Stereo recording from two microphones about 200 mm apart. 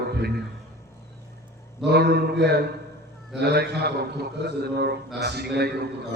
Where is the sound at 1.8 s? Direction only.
55° right (ahead or behind).